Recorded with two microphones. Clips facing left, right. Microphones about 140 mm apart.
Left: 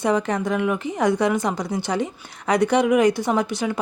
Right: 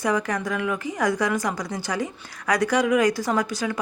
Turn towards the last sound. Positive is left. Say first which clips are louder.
# left 2 dB
turn(degrees=20)  # may be behind; listen again after turning